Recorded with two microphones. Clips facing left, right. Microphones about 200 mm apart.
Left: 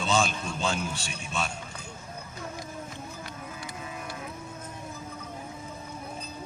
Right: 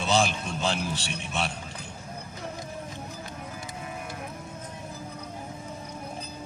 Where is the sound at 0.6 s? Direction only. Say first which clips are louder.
Right 1 dB; 35° right (ahead or behind).